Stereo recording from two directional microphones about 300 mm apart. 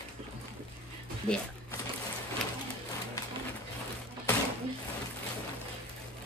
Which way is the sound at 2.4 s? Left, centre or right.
Centre.